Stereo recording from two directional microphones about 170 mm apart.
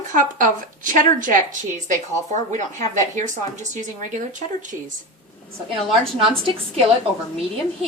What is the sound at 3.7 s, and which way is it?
Speech, 50° right (ahead or behind).